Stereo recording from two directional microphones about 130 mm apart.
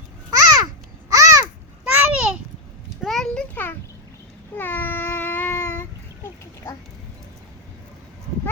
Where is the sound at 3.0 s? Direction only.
Centre (ahead or behind).